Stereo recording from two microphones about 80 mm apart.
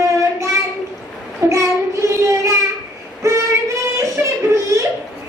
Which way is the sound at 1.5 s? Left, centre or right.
Right.